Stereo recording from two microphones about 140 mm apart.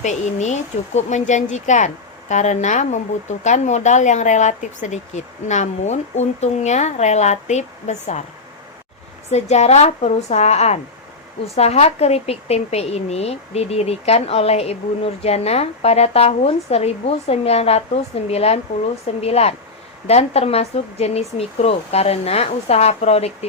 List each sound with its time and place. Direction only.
0.0 s speech: 55° left (ahead or behind)
9.3 s a woman's voice: 55° left (ahead or behind)